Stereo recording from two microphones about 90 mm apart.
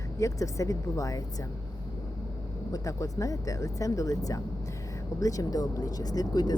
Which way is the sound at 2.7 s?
35° left (ahead or behind).